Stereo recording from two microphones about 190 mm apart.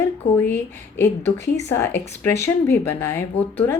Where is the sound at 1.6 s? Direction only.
10° left (ahead or behind).